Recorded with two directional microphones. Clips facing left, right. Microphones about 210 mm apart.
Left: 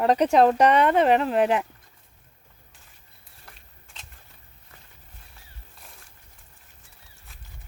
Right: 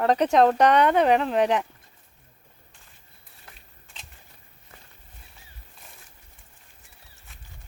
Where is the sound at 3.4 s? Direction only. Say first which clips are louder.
Even; centre (ahead or behind).